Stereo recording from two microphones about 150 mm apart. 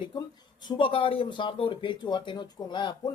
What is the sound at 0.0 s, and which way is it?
Speech, 30° left (ahead or behind).